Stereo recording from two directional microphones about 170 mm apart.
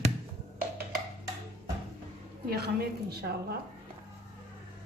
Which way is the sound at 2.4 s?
65° right (ahead or behind).